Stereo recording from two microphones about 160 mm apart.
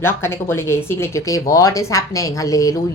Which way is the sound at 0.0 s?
15° left (ahead or behind).